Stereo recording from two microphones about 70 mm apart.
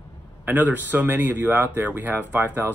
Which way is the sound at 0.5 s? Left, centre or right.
Right.